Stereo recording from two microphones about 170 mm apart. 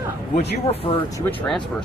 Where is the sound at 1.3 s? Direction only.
5° left (ahead or behind).